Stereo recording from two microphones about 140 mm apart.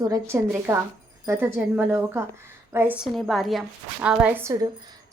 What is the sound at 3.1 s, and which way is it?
A woman's voice, centre (ahead or behind).